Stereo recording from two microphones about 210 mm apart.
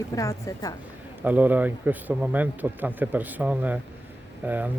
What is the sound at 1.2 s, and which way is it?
Speech, 10° right (ahead or behind).